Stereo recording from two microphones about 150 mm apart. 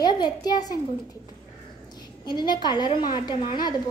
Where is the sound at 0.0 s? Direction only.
25° left (ahead or behind).